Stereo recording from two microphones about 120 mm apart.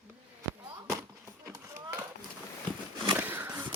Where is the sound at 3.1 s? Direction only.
15° right (ahead or behind).